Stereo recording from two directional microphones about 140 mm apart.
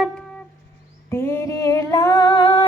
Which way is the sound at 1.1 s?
20° left (ahead or behind).